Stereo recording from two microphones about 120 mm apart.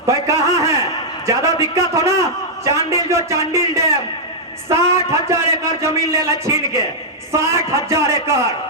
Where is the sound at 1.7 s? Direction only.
25° right (ahead or behind).